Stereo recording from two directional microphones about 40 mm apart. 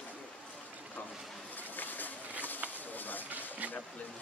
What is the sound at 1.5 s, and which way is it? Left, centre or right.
Boat, left.